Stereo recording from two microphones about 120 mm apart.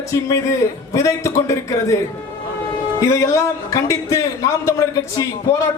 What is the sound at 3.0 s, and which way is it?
A man's voice, 25° left (ahead or behind).